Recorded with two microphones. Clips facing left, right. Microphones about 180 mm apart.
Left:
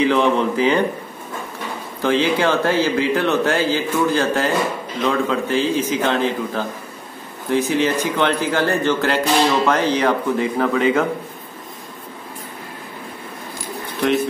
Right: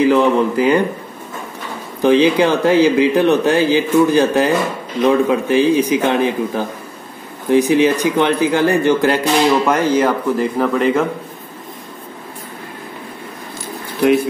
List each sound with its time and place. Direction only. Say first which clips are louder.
0.0 s a man's voice: right 4 dB; 10° right (ahead or behind)
2.0 s a man's voice: right 6 dB; 15° right (ahead or behind); by 11.1 s centre (ahead or behind)